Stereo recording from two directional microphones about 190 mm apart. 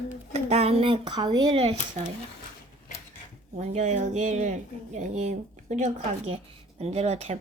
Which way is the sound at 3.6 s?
35° right (ahead or behind).